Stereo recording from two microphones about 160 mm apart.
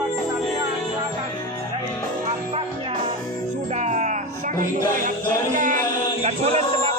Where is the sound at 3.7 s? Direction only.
45° right (ahead or behind).